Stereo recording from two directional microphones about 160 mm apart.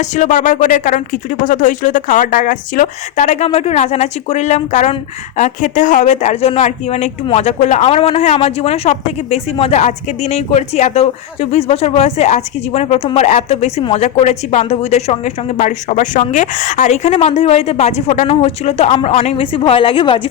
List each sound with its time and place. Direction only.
0.0 s speech: 50° left (ahead or behind)
3.2 s speech: 40° left (ahead or behind)